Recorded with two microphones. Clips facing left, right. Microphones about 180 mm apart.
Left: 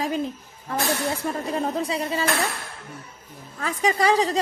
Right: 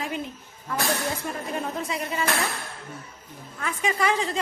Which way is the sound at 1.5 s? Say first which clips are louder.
Left 4 dB; 30° left (ahead or behind).